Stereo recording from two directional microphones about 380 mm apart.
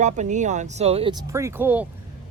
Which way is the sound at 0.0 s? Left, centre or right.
Centre.